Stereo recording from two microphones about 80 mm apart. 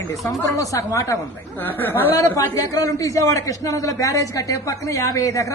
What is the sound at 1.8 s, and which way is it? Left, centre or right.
Speech, left.